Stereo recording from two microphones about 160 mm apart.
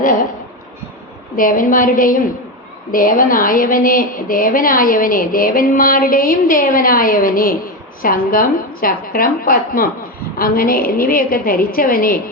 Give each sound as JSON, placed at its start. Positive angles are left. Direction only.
{"t": 1.4, "sound": "speech", "side_deg": 60}